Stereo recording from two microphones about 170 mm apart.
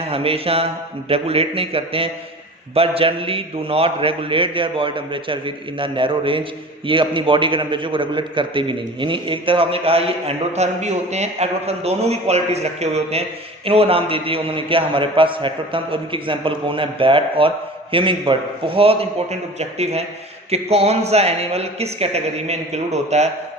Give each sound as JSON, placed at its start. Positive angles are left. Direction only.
{"t": 0.0, "sound": "a man's voice", "side_deg": -35}